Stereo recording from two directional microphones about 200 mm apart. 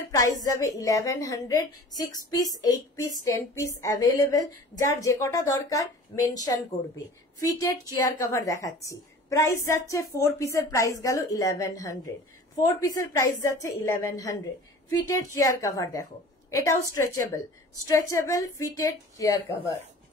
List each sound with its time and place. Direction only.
0.1 s a woman's voice: 15° left (ahead or behind)
7.9 s a woman's voice: 15° left (ahead or behind)